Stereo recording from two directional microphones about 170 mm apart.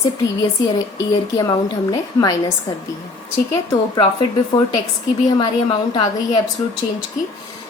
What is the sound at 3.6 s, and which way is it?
Speech, 25° left (ahead or behind).